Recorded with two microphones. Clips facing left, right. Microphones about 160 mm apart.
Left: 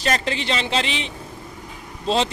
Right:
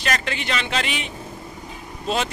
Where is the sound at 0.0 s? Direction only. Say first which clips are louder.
Left 3 dB; 30° left (ahead or behind).